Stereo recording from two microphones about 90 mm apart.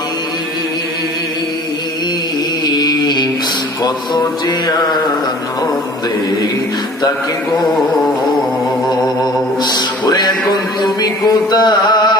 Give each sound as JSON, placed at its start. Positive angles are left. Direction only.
{"t": 2.6, "sound": "a sound", "side_deg": 50}
{"t": 3.8, "sound": "music", "side_deg": 50}
{"t": 8.8, "sound": "music", "side_deg": 50}
{"t": 11.5, "sound": "mantra", "side_deg": 50}